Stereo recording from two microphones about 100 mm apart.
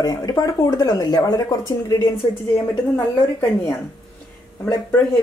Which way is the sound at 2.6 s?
25° left (ahead or behind).